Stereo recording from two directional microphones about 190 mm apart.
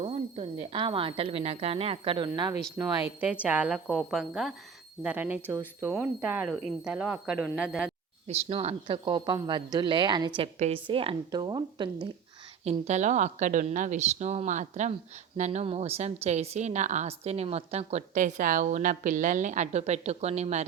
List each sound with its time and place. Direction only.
0.0 s a woman's voice: 30° right (ahead or behind)
2.7 s a woman's voice: 10° right (ahead or behind)
8.3 s speech: 30° right (ahead or behind)
12.6 s a woman's voice: 35° right (ahead or behind)